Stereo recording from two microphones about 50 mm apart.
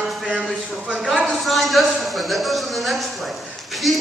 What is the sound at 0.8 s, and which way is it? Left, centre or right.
Speech, centre.